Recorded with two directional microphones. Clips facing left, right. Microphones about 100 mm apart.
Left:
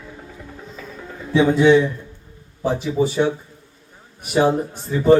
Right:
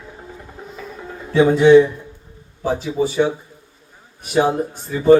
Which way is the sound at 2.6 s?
15° right (ahead or behind).